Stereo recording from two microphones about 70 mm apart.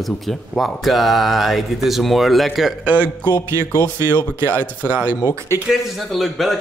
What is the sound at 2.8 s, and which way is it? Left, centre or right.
Speech, right.